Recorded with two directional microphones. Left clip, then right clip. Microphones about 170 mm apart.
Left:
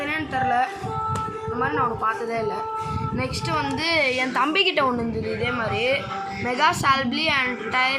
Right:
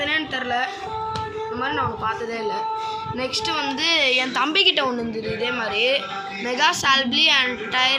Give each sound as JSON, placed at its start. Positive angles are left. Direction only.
{"t": 0.1, "sound": "music", "side_deg": 10}
{"t": 1.6, "sound": "a woman's voice", "side_deg": 15}
{"t": 3.6, "sound": "a woman's voice", "side_deg": 10}